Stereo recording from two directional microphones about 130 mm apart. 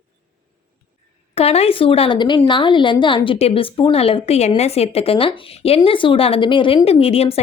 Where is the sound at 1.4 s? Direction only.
50° left (ahead or behind).